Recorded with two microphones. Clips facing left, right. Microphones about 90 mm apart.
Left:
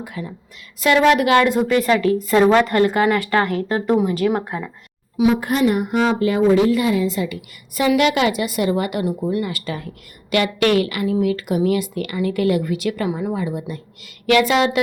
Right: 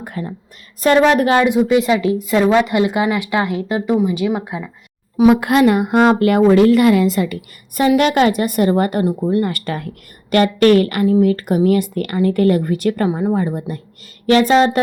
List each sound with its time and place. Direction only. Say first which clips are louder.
0.0 s a woman's voice: right 3 dB; 50° right (ahead or behind)
1.8 s speech: right 1 dB; 20° right (ahead or behind)
5.4 s a woman's voice: right 5 dB; 90° right; by 9.5 s 35° right (ahead or behind)
9.5 s a woman's voice: right 4 dB; 55° right (ahead or behind); by 14.8 s 40° right (ahead or behind)